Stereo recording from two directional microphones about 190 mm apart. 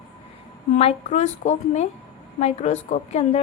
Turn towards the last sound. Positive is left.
turn(degrees=35)  # may be behind; listen again after turning